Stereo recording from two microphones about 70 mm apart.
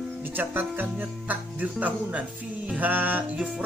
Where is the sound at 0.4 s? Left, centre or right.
Right.